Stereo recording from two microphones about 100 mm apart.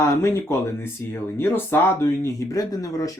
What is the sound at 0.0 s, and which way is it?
Speech, 25° left (ahead or behind).